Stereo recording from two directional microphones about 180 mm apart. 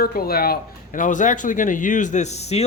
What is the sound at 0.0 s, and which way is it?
Speech, 55° left (ahead or behind).